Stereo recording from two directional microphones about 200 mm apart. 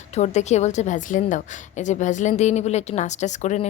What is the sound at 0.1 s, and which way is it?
A woman's voice, 35° left (ahead or behind).